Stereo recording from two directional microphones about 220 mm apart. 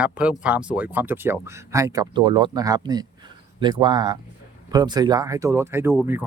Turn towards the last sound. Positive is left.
turn(degrees=-10)  # may be behind; listen again after turning